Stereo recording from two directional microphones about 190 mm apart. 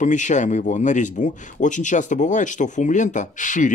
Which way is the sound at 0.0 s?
40° left (ahead or behind).